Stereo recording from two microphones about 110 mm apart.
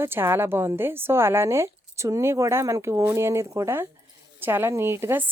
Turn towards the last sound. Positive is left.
turn(degrees=-20)  # may be behind; listen again after turning